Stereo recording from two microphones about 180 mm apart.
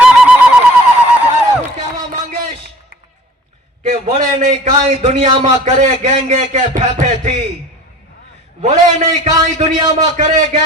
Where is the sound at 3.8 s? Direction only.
35° right (ahead or behind).